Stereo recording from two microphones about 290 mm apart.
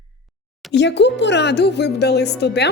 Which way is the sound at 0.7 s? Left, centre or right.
Left.